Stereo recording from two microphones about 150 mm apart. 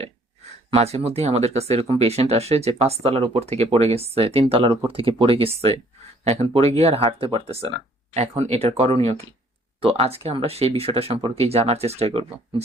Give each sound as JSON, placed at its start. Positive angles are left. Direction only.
{"t": 0.7, "sound": "speech", "side_deg": -40}